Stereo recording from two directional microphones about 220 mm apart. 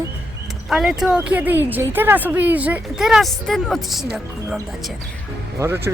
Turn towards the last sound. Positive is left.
turn(degrees=-10)  # may be behind; listen again after turning